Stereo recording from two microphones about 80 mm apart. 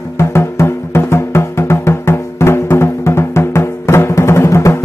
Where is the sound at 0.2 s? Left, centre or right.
Left.